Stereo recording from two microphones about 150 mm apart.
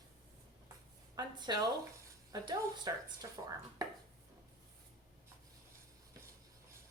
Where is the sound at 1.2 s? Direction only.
30° right (ahead or behind).